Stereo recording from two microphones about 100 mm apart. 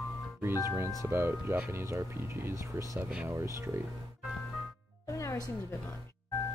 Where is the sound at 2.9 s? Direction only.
10° right (ahead or behind).